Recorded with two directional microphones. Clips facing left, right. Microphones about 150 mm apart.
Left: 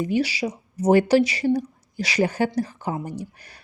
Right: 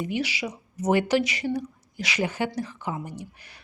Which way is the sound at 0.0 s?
35° left (ahead or behind).